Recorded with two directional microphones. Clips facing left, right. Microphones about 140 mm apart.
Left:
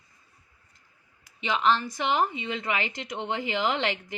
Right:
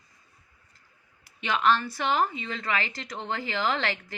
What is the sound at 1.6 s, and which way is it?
A woman's voice, 15° left (ahead or behind).